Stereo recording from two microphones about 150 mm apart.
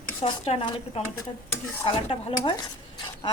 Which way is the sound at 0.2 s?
40° left (ahead or behind).